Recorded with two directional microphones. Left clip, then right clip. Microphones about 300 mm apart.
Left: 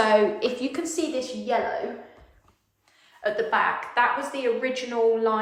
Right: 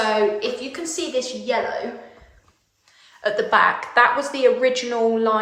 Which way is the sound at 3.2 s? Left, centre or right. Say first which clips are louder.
Right 6 dB; centre.